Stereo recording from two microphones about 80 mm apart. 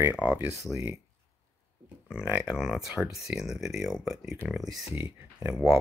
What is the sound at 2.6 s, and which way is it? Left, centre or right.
Speech, centre.